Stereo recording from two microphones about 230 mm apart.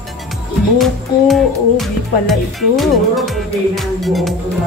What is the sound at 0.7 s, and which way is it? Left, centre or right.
Music, centre.